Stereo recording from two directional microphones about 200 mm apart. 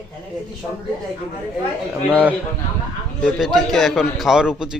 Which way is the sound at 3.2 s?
Centre (ahead or behind).